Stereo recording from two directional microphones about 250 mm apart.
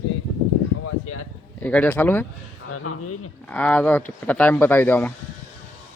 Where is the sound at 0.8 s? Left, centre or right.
Left.